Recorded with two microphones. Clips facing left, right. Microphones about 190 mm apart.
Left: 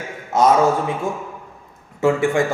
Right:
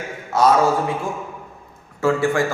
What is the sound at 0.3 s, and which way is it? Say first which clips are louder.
Speech: left 1 dB; 20° left (ahead or behind).